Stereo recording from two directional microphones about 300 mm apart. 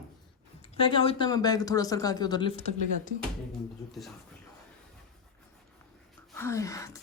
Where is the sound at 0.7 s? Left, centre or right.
Centre.